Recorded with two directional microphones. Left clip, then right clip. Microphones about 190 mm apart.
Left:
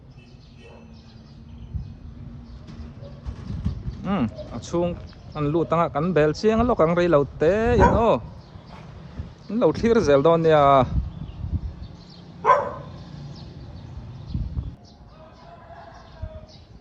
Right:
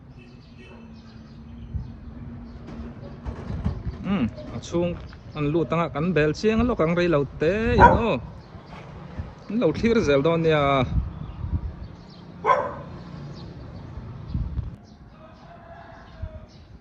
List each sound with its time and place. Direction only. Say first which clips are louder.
3.2 s a sound: right 4 dB; 45° right (ahead or behind)
4.0 s speech: left 2 dB; 10° left (ahead or behind)
9.6 s speech: left 2 dB; 10° left (ahead or behind)